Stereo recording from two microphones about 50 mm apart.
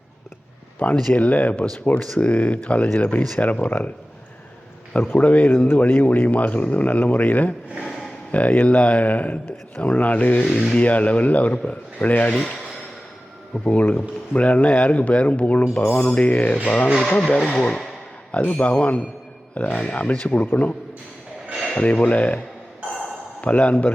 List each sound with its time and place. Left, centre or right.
0.8 s speech: left
5.1 s speech: left
5.5 s speech: left
5.8 s speech: left
7.9 s a sound: centre
8.3 s speech: left
12.3 s speech: centre
13.5 s speech: left
16.0 s speech: left
21.8 s speech: left